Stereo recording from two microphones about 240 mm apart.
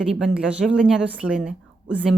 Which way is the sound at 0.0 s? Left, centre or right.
Centre.